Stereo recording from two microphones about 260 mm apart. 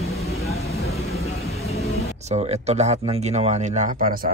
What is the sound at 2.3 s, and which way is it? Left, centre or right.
Speech, right.